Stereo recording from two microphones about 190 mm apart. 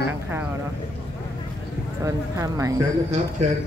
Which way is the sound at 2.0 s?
15° right (ahead or behind).